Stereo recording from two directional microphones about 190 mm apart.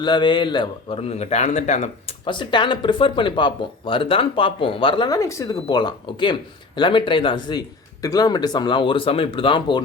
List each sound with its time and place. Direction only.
0.0 s a man's voice: 25° left (ahead or behind)